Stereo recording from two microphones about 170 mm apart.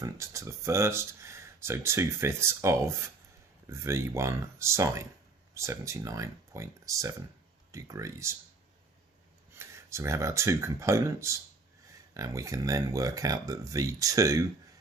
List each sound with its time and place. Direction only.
0.0 s speech: 15° right (ahead or behind)
9.6 s speech: 15° right (ahead or behind)